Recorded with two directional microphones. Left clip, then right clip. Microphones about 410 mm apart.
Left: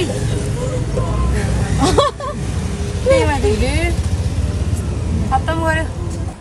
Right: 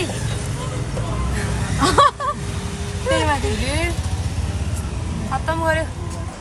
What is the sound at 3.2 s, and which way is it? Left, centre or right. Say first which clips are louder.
Vehicle: left 4 dB; right.